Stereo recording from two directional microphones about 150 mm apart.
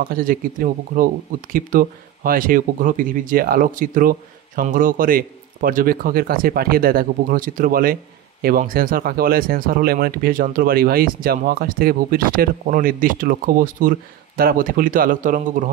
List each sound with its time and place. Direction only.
0.1 s speech: 70° right (ahead or behind)